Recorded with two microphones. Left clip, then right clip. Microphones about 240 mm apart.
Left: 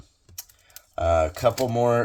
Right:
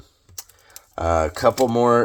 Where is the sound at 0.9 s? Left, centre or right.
Right.